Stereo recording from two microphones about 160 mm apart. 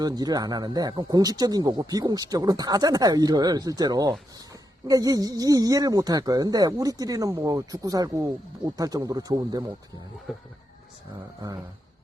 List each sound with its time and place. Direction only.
0.0 s speech: 25° right (ahead or behind)
10.3 s music: centre (ahead or behind)
11.3 s speech: 20° right (ahead or behind)